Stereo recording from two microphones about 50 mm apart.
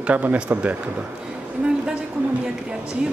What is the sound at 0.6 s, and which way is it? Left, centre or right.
Speech, right.